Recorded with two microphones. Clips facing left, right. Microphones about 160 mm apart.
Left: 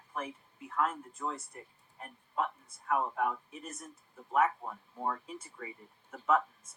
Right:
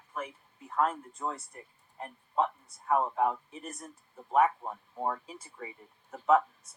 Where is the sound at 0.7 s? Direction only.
35° right (ahead or behind).